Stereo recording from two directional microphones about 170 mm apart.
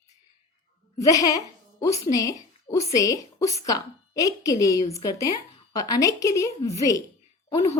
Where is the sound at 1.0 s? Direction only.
20° left (ahead or behind).